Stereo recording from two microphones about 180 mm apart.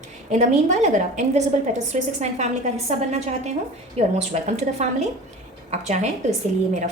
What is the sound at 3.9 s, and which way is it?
Speech, 40° right (ahead or behind).